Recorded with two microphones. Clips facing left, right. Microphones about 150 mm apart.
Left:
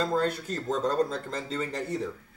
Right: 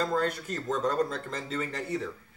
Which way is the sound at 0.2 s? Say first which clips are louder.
Left 2 dB; 30° left (ahead or behind).